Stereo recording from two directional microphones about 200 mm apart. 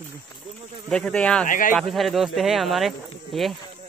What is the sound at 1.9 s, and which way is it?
Speech, centre (ahead or behind).